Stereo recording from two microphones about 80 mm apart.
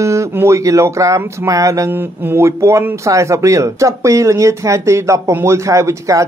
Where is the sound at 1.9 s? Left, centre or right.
Right.